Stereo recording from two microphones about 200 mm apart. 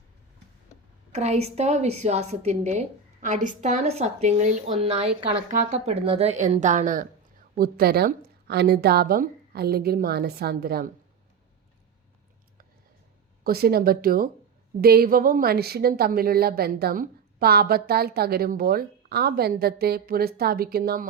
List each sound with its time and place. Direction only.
1.1 s a woman's voice: 35° right (ahead or behind); by 10.9 s 50° right (ahead or behind)
13.4 s a woman's voice: 50° right (ahead or behind)